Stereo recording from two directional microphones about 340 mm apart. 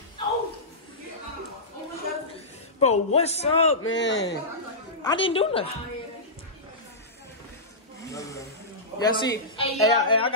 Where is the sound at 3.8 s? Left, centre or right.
Left.